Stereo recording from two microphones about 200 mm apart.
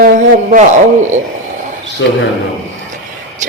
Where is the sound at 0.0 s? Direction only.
40° right (ahead or behind).